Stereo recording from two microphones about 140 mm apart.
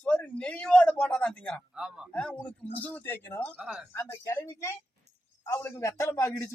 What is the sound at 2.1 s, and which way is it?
Speech, 5° left (ahead or behind).